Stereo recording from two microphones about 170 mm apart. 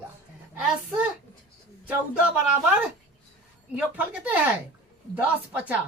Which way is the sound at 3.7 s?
10° right (ahead or behind).